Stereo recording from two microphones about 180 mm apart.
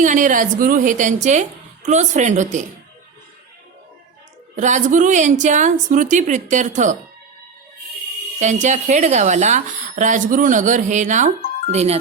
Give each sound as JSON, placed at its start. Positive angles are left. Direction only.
{"t": 0.0, "sound": "speech", "side_deg": -45}
{"t": 4.5, "sound": "speech", "side_deg": -45}
{"t": 8.4, "sound": "speech", "side_deg": -40}